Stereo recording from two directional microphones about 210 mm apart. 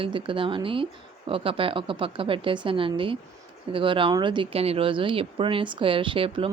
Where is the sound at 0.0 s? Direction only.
25° right (ahead or behind).